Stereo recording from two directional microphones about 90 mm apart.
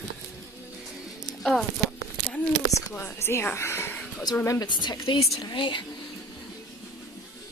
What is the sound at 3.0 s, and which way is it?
Speech, 30° left (ahead or behind).